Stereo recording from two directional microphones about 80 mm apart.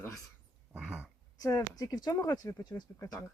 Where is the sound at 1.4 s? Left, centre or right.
Left.